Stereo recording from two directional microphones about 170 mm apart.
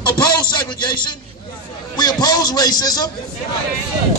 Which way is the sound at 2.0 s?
25° left (ahead or behind).